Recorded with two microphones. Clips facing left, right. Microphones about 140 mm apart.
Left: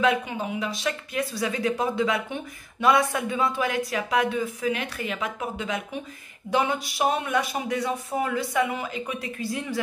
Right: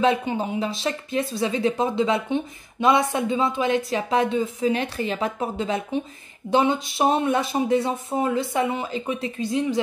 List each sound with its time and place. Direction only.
0.0 s speech: 30° right (ahead or behind)